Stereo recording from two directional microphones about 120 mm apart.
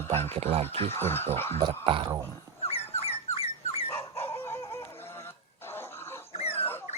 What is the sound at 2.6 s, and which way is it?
Dog, 55° left (ahead or behind).